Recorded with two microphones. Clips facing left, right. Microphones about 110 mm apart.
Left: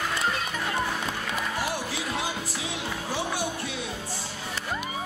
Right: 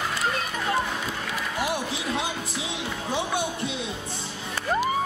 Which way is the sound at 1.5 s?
20° right (ahead or behind).